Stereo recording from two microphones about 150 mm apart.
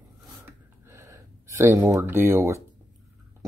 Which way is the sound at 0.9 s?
20° right (ahead or behind).